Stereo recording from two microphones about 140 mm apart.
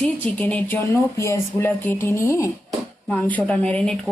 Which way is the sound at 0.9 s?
20° left (ahead or behind).